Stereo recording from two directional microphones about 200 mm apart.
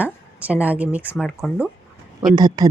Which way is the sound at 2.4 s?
20° right (ahead or behind).